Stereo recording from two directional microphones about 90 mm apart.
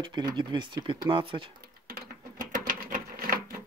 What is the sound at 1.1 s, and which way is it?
Speech, 75° right (ahead or behind).